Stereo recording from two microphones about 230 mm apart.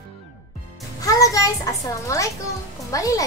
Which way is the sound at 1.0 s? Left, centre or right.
Centre.